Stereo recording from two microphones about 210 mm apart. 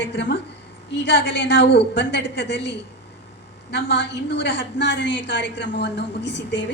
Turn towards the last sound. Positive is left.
turn(degrees=55)  # may be behind; listen again after turning